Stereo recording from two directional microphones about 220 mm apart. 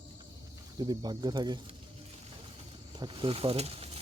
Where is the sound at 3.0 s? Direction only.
20° right (ahead or behind).